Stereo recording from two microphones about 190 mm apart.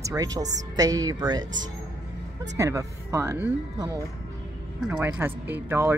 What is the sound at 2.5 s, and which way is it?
Speech, 15° right (ahead or behind).